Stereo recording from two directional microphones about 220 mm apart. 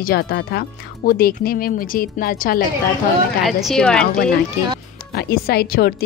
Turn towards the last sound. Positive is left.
turn(degrees=45)  # may be behind; listen again after turning